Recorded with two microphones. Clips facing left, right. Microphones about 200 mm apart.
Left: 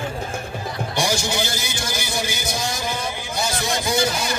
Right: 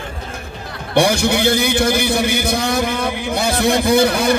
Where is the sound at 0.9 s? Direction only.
60° right (ahead or behind).